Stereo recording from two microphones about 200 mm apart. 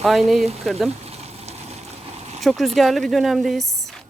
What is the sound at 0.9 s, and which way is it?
Frying, 30° right (ahead or behind).